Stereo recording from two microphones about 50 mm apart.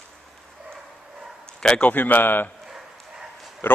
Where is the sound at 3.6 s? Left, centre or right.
Left.